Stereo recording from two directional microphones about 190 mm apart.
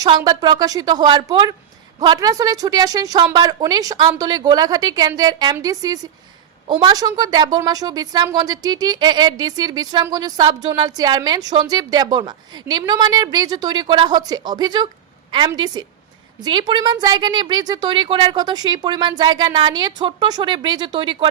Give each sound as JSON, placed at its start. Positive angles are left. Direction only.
{"t": 0.0, "sound": "a woman's voice", "side_deg": -20}